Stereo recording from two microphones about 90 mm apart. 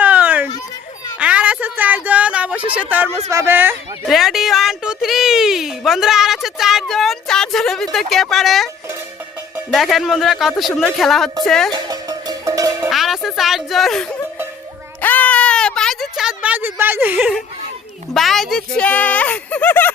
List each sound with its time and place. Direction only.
0.0 s a sound: 20° right (ahead or behind)
2.9 s speech: 20° right (ahead or behind)
3.2 s speech: 35° right (ahead or behind)
3.5 s speech: 20° right (ahead or behind)
4.1 s a woman's voice: centre (ahead or behind)
9.7 s a woman's voice: centre (ahead or behind)
11.7 s music: 50° right (ahead or behind)
12.9 s speech: centre (ahead or behind)
15.0 s a sound: 20° left (ahead or behind); by 17.3 s 20° right (ahead or behind)
18.1 s a woman's voice: centre (ahead or behind)
18.8 s speech: 15° left (ahead or behind)